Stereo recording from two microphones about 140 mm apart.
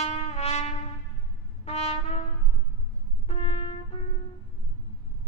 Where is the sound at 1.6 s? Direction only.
45° left (ahead or behind).